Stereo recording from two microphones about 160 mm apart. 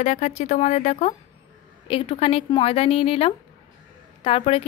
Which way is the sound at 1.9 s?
35° left (ahead or behind).